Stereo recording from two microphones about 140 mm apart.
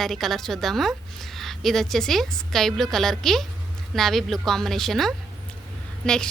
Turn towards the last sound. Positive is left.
turn(degrees=5)  # may be behind; listen again after turning